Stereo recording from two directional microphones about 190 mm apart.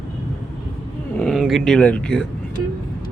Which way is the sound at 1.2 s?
Centre (ahead or behind).